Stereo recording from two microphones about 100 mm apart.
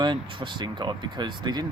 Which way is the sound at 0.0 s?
50° right (ahead or behind).